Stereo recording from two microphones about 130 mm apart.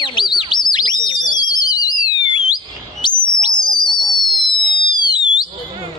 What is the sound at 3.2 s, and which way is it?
Bird, 35° left (ahead or behind).